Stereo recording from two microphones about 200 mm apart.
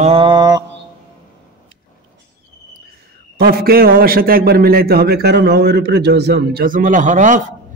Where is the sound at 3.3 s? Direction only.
50° right (ahead or behind).